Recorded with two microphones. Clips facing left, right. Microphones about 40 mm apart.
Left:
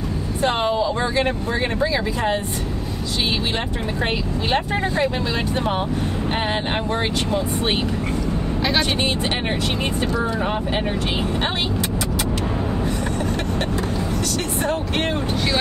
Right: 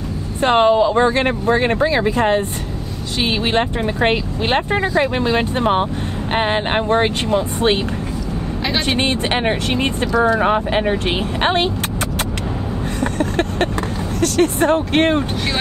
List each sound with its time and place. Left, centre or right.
0.4 s speech: right
3.5 s speech: right
10.1 s speech: right
14.2 s speech: right